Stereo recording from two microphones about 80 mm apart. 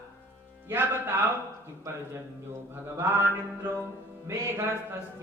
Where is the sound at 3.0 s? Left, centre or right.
Right.